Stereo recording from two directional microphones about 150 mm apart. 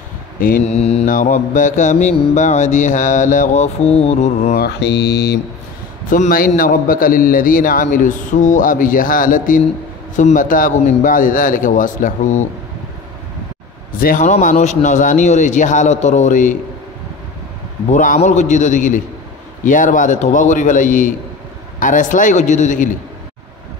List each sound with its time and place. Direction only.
0.7 s mantra: 45° left (ahead or behind)
1.0 s a man's voice: 60° left (ahead or behind)
2.3 s mantra: 55° left (ahead or behind)
5.1 s speech: 90° left
6.0 s a man's voice: 60° left (ahead or behind)
13.9 s a man's voice: 65° left (ahead or behind)
17.8 s a man's voice: 55° left (ahead or behind)